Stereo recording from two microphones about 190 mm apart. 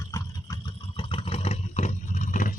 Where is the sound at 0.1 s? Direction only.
20° left (ahead or behind).